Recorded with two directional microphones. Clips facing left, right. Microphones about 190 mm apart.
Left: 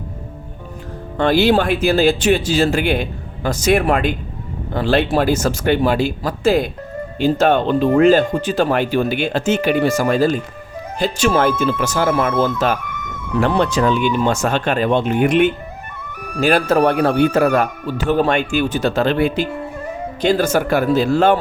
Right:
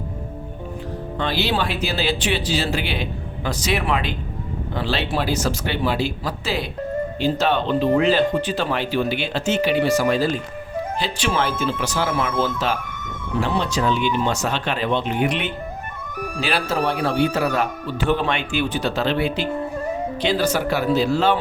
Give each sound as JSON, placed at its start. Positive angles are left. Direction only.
{"t": 1.2, "sound": "speech", "side_deg": 50}